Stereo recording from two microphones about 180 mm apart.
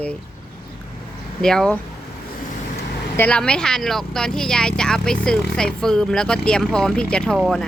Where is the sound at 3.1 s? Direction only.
10° left (ahead or behind).